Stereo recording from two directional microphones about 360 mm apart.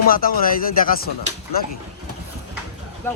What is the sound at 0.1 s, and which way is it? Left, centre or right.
Speech, left.